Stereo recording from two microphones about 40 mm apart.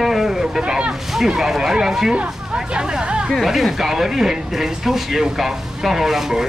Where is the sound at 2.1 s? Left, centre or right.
Right.